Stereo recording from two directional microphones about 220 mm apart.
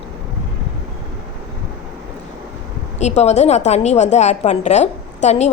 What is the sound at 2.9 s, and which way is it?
A woman's voice, 30° left (ahead or behind).